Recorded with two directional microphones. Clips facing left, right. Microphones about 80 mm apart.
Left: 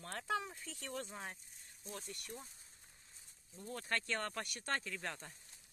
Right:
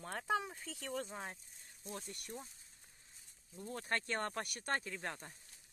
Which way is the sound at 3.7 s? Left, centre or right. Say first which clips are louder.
Right 1 dB; right.